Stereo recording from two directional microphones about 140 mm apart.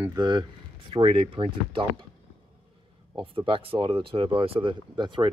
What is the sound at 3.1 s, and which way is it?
Speech, 40° right (ahead or behind).